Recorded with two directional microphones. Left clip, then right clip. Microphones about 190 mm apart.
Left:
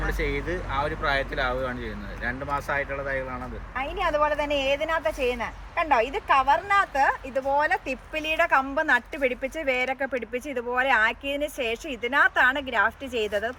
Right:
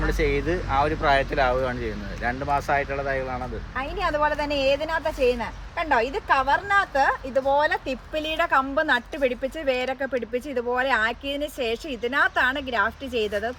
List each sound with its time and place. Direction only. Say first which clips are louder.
0.2 s speech: right 5 dB; 25° right (ahead or behind)
4.0 s a woman's voice: even; 30° left (ahead or behind)